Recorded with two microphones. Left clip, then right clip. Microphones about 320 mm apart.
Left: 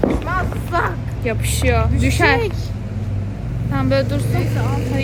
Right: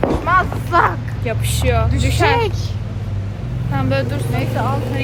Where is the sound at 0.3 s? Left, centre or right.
Centre.